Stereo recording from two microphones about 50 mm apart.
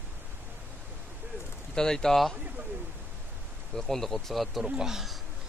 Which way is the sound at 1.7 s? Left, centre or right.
Centre.